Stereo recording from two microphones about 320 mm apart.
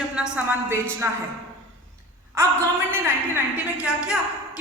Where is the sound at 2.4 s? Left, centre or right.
Centre.